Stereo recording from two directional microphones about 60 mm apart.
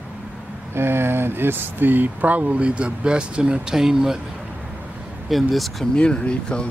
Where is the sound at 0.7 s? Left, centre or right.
Right; by 4.2 s centre.